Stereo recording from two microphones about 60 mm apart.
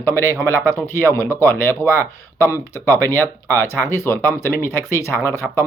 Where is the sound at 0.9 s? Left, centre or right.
Left.